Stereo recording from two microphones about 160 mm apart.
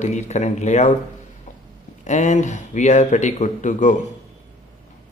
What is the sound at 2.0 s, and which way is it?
Speech, 45° left (ahead or behind).